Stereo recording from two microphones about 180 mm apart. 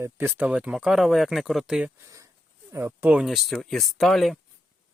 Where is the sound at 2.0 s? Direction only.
15° right (ahead or behind); by 4.4 s centre (ahead or behind).